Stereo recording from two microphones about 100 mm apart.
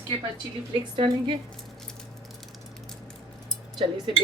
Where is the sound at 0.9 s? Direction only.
55° right (ahead or behind).